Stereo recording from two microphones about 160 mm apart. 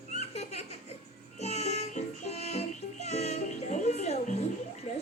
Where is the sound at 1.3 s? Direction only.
45° left (ahead or behind).